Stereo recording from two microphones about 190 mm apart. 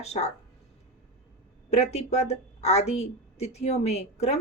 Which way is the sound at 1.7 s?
35° left (ahead or behind).